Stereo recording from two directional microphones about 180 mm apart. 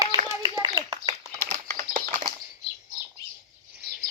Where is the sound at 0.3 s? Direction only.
20° right (ahead or behind).